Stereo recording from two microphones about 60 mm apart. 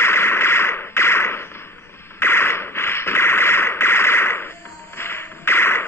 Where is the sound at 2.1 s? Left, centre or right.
Left.